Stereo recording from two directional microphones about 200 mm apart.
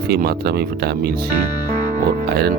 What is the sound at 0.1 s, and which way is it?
Speech, 50° right (ahead or behind).